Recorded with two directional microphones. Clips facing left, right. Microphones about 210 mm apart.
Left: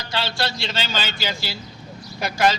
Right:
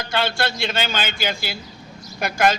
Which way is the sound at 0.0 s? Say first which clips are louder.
Right 3 dB; 55° right (ahead or behind).